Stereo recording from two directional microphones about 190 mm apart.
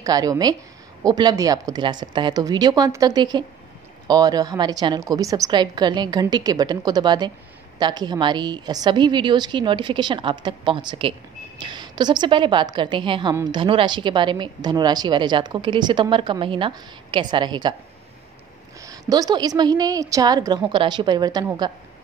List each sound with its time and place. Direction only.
0.0 s speech: 20° right (ahead or behind)
18.8 s speech: 20° right (ahead or behind)